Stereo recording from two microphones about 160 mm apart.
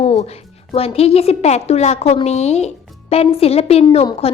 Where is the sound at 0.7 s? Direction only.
40° left (ahead or behind).